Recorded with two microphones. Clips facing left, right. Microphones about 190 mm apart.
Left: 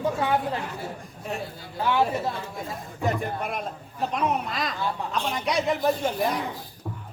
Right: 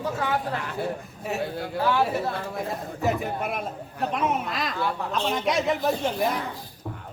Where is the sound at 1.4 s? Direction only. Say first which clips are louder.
Right 7 dB; 70° right (ahead or behind).